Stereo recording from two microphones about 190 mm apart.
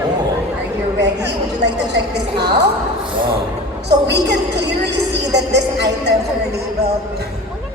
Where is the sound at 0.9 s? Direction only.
65° right (ahead or behind).